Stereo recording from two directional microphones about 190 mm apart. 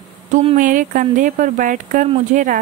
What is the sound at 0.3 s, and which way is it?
A woman's voice, 35° right (ahead or behind).